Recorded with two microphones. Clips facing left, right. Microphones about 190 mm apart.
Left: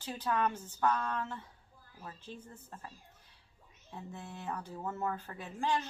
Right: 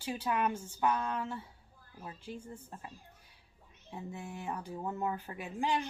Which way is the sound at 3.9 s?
10° right (ahead or behind).